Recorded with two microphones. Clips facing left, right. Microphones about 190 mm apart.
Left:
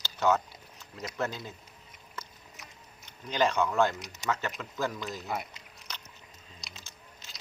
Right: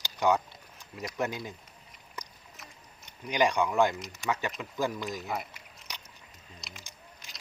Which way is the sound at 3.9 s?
Centre (ahead or behind).